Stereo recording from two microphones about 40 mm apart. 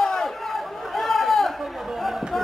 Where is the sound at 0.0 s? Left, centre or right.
Centre.